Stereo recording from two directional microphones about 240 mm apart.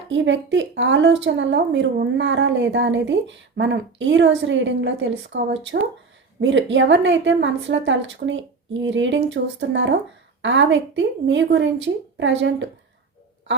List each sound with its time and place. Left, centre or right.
0.1 s a woman's voice: right
6.4 s a woman's voice: right